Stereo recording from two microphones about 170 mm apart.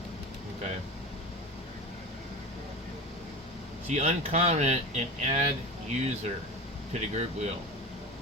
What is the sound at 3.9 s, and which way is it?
Speech, 40° right (ahead or behind).